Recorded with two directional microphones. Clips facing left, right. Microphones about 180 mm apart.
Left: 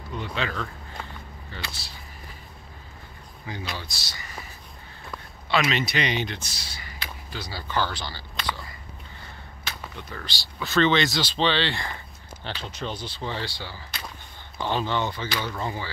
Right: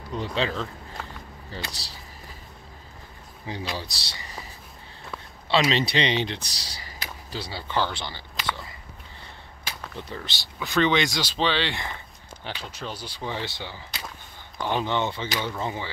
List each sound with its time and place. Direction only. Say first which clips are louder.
0.1 s speech: right 3 dB; 35° right (ahead or behind)
3.7 s speech: right 3 dB; 35° right (ahead or behind)
5.5 s speech: right 2 dB; 30° right (ahead or behind)
9.9 s speech: right 2 dB; 25° right (ahead or behind)